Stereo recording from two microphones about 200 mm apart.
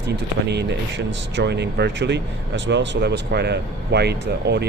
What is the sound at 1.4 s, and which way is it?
Speech, 60° right (ahead or behind).